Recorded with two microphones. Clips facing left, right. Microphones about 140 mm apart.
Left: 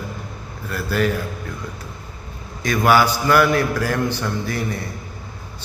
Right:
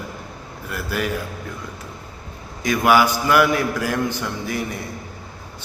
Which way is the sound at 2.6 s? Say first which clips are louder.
Even; 15° right (ahead or behind).